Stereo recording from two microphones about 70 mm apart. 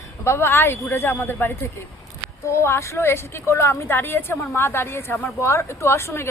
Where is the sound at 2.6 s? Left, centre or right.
Left.